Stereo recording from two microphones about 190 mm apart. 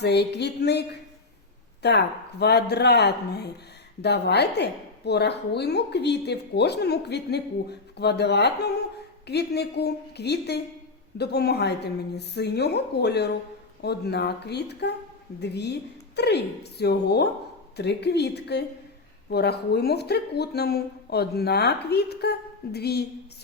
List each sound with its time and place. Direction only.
0.0 s a woman's voice: 60° left (ahead or behind)